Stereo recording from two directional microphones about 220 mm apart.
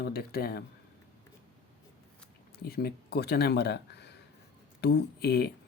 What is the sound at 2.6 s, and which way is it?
Speech, 45° left (ahead or behind).